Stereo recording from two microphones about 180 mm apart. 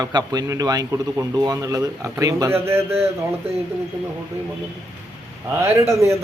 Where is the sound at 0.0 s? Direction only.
20° right (ahead or behind).